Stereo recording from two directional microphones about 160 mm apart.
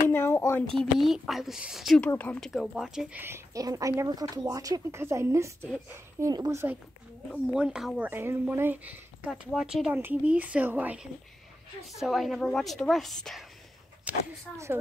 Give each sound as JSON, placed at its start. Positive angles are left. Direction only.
{"t": 0.1, "sound": "speech", "side_deg": 15}
{"t": 0.9, "sound": "a woman's voice", "side_deg": 0}
{"t": 2.0, "sound": "speech", "side_deg": 10}
{"t": 7.4, "sound": "a woman's voice", "side_deg": -5}